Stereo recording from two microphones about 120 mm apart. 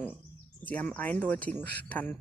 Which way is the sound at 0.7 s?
15° left (ahead or behind).